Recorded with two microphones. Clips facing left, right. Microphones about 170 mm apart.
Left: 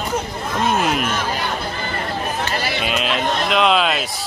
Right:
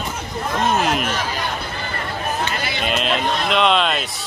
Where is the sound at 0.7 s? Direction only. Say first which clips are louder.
Even; centre (ahead or behind).